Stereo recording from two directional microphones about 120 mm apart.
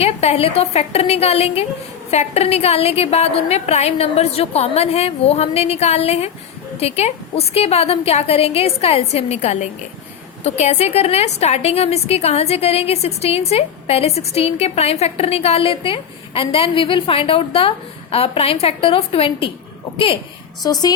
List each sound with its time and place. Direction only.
0.0 s a woman's voice: 60° left (ahead or behind)